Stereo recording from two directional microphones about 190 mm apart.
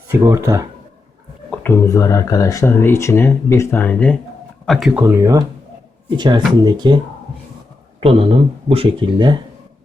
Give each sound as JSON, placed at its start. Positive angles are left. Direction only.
{"t": 0.1, "sound": "speech", "side_deg": -15}
{"t": 1.5, "sound": "speech", "side_deg": 10}
{"t": 5.0, "sound": "speech", "side_deg": -15}
{"t": 8.0, "sound": "speech", "side_deg": -30}